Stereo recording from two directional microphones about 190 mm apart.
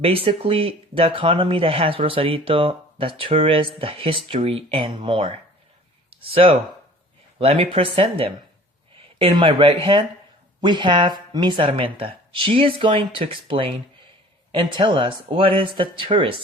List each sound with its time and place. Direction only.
0.0 s speech: 30° right (ahead or behind)